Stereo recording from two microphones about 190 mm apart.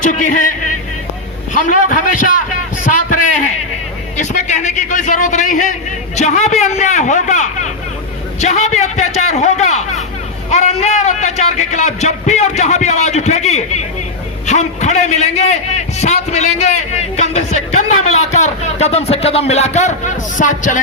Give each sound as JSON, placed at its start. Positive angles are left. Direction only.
{"t": 0.0, "sound": "a man's voice", "side_deg": 40}
{"t": 1.6, "sound": "a man's voice", "side_deg": 40}
{"t": 4.2, "sound": "a man's voice", "side_deg": 40}